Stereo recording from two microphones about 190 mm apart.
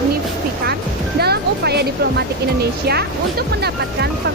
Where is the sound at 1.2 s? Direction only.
55° right (ahead or behind).